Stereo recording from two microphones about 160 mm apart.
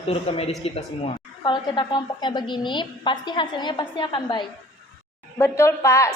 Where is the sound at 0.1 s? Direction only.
40° left (ahead or behind).